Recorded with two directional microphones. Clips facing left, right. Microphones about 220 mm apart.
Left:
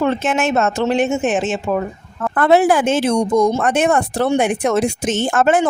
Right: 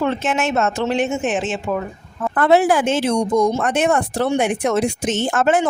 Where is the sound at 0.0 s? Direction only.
50° left (ahead or behind).